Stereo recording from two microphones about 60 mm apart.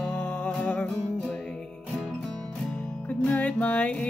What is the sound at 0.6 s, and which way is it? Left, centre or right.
Music, left.